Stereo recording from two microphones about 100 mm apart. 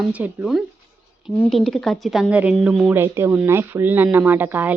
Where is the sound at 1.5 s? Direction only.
5° left (ahead or behind).